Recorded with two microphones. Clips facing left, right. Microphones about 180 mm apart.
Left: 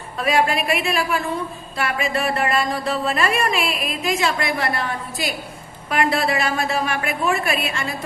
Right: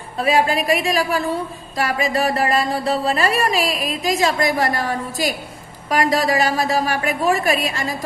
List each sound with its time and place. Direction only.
0.2 s a woman's voice: 35° right (ahead or behind)